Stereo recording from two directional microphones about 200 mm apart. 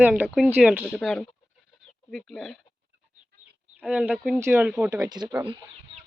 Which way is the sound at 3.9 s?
5° right (ahead or behind).